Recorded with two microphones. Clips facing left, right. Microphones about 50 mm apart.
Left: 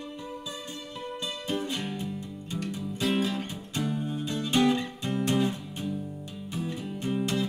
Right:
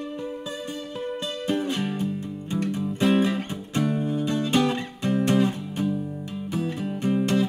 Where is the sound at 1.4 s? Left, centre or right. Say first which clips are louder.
Right 6 dB; right.